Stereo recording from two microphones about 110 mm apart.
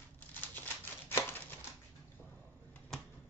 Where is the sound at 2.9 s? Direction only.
5° left (ahead or behind).